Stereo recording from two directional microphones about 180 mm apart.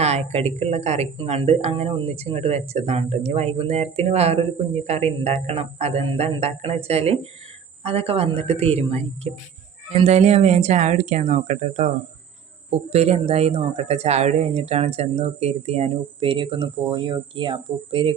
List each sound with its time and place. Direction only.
0.0 s a woman's voice: 35° right (ahead or behind)